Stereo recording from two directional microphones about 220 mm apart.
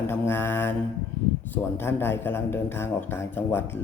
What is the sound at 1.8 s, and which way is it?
A man's voice, 10° left (ahead or behind).